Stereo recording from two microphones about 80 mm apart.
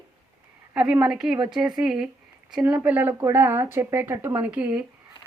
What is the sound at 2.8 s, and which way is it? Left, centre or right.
A woman's voice, right.